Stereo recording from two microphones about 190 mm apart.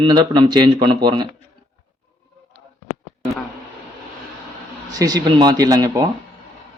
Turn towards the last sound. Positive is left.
turn(degrees=-20)  # may be behind; listen again after turning